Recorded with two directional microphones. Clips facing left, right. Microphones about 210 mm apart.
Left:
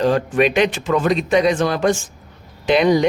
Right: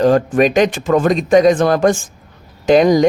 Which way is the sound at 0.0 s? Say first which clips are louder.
Right 4 dB; 45° right (ahead or behind).